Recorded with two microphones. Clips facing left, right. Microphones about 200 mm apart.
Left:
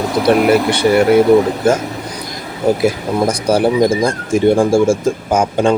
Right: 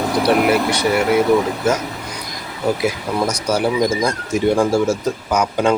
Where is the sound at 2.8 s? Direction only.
55° left (ahead or behind).